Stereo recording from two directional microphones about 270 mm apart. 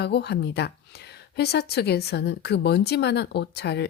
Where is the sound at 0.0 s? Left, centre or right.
Left.